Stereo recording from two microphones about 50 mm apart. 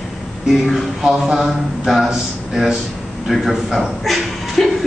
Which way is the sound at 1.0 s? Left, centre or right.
Centre.